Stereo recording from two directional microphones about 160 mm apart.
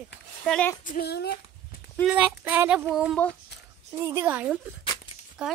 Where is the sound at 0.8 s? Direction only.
70° left (ahead or behind).